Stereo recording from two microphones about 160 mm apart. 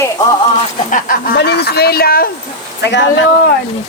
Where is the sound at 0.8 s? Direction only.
60° left (ahead or behind).